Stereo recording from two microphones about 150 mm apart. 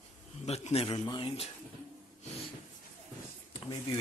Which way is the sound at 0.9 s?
30° left (ahead or behind).